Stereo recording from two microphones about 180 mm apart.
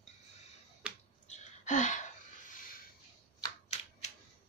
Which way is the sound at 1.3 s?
40° left (ahead or behind).